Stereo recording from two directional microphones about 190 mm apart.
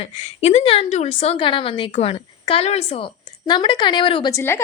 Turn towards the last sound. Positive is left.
turn(degrees=15)  # may be behind; listen again after turning